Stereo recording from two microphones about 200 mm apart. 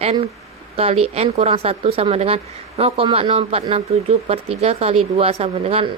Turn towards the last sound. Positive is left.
turn(degrees=-30)  # may be behind; listen again after turning